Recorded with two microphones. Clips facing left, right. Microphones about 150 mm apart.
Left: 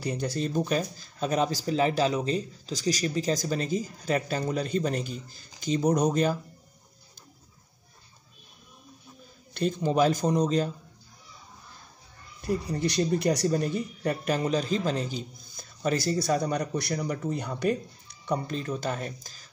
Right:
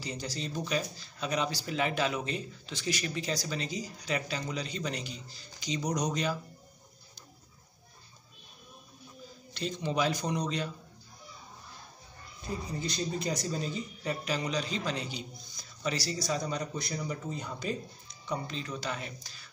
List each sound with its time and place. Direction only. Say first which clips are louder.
0.0 s speech: left 8 dB; 55° left (ahead or behind)
9.5 s speech: left 7 dB; 50° left (ahead or behind)
12.4 s speech: left 8 dB; 65° left (ahead or behind)
18.2 s speech: left 6 dB; 55° left (ahead or behind)